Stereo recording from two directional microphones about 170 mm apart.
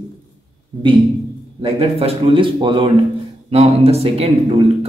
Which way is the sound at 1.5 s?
35° right (ahead or behind).